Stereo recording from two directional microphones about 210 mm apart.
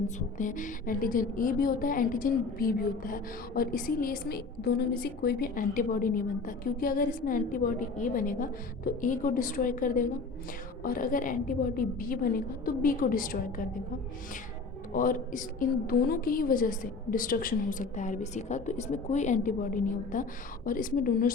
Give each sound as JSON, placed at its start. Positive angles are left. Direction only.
{"t": 0.3, "sound": "a woman's voice", "side_deg": 40}
{"t": 14.9, "sound": "a woman's voice", "side_deg": 40}